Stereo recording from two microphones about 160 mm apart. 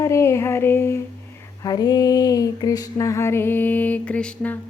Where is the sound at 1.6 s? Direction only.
25° left (ahead or behind).